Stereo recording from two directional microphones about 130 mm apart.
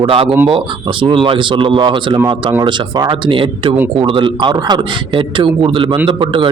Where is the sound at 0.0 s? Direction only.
45° right (ahead or behind).